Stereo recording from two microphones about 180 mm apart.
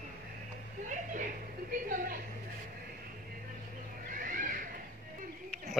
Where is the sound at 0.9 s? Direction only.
45° right (ahead or behind).